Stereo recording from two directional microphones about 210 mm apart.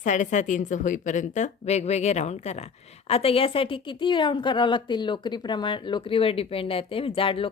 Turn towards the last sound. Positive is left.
turn(degrees=25)  # may be behind; listen again after turning